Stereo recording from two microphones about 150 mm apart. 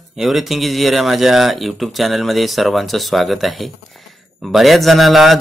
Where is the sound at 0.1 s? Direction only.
Centre (ahead or behind).